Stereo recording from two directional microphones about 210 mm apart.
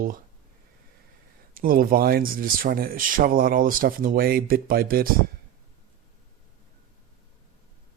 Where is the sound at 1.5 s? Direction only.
45° right (ahead or behind).